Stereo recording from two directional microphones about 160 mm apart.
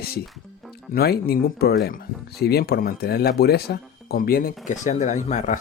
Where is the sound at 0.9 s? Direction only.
75° left (ahead or behind); by 5.5 s 50° left (ahead or behind).